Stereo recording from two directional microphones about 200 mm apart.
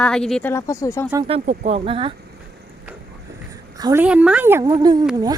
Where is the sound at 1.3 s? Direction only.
30° right (ahead or behind).